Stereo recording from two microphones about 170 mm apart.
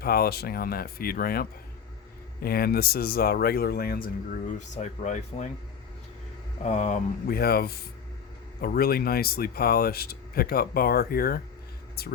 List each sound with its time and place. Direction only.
0.0 s speech: 65° left (ahead or behind)
4.5 s speech: 45° left (ahead or behind)
6.7 s speech: 45° left (ahead or behind)
7.3 s speech: 65° left (ahead or behind)